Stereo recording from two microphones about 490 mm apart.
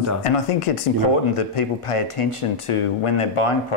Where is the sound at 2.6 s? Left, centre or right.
Left.